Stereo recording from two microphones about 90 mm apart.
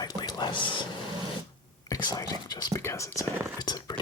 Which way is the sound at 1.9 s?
50° left (ahead or behind).